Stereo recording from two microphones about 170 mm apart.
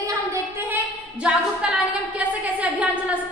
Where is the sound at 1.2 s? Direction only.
5° right (ahead or behind).